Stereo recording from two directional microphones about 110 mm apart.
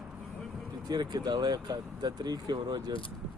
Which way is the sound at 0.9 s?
40° right (ahead or behind).